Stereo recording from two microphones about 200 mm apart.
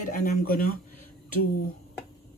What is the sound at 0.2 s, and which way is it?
Speech, 45° left (ahead or behind).